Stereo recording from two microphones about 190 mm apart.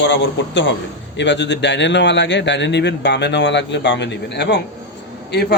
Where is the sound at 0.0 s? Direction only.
70° left (ahead or behind).